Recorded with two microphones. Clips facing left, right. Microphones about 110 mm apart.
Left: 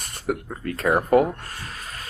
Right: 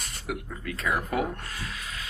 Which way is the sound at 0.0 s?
45° left (ahead or behind).